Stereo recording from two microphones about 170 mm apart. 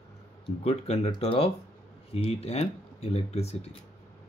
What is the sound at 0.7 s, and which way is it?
Speech, 40° left (ahead or behind).